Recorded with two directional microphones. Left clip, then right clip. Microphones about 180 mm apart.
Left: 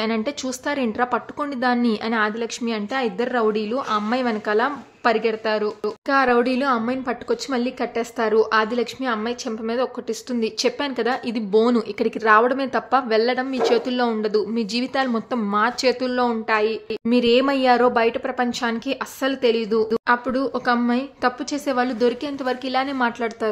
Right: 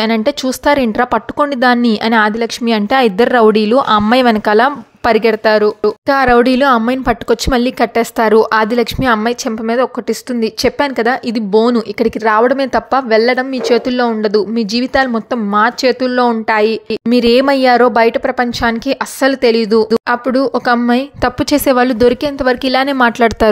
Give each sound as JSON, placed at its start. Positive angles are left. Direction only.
{"t": 0.0, "sound": "a woman's voice", "side_deg": -40}